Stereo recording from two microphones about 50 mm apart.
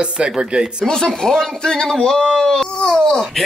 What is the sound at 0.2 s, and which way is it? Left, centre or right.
Speech, centre.